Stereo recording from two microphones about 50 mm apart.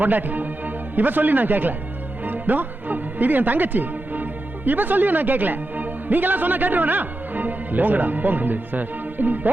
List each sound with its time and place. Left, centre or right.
0.0 s a man's voice: right